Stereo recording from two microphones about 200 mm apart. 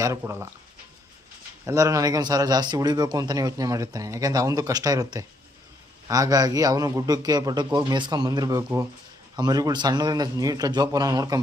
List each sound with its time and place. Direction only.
0.0 s speech: 15° right (ahead or behind)
1.6 s speech: 15° right (ahead or behind)